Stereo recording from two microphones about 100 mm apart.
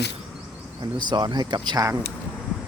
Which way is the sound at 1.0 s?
50° right (ahead or behind).